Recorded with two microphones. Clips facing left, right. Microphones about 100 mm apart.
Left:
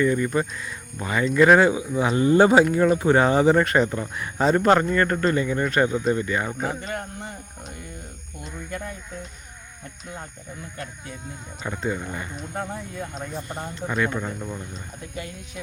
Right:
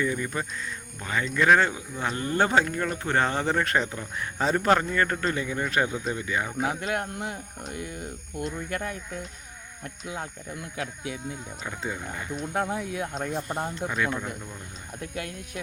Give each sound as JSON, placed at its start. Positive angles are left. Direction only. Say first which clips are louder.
{"t": 0.0, "sound": "speech", "louder": "left 7 dB", "side_deg": 0}
{"t": 6.7, "sound": "speech", "louder": "right 2 dB", "side_deg": -65}
{"t": 10.8, "sound": "speech", "louder": "right 5 dB", "side_deg": -90}
{"t": 11.3, "sound": "speech", "louder": "left 2 dB", "side_deg": 0}
{"t": 12.7, "sound": "speech", "louder": "right 3 dB", "side_deg": -75}
{"t": 13.3, "sound": "speech", "louder": "right 2 dB", "side_deg": -5}